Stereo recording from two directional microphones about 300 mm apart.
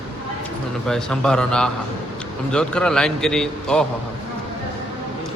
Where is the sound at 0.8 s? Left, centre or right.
Centre.